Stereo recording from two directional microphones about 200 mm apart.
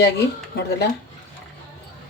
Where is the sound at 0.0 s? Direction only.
55° left (ahead or behind).